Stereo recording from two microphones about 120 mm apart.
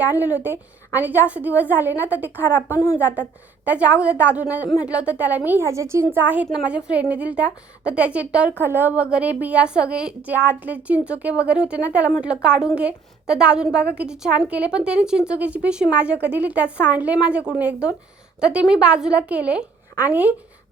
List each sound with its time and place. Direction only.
0.0 s a woman's voice: 15° right (ahead or behind)
2.7 s a woman's voice: 25° left (ahead or behind)
3.7 s a woman's voice: 10° right (ahead or behind)